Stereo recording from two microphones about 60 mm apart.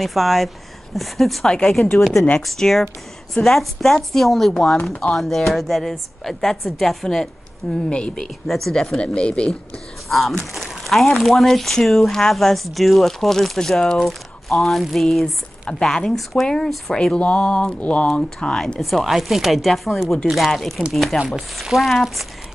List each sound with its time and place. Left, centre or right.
0.0 s speech: centre
7.9 s speech: centre
8.9 s speech: centre
10.0 s speech: centre
18.6 s speech: centre